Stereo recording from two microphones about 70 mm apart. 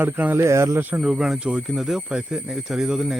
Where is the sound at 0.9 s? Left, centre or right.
Centre.